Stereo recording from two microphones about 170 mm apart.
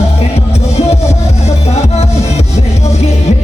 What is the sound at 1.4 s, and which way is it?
Music, 40° left (ahead or behind).